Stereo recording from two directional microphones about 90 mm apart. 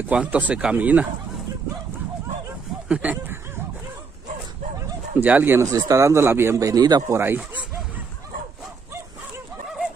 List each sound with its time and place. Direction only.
0.1 s speech: 10° right (ahead or behind)
2.9 s speech: 20° right (ahead or behind)
5.1 s speech: 20° right (ahead or behind)
5.7 s speech: 40° right (ahead or behind)
7.1 s speech: 25° right (ahead or behind)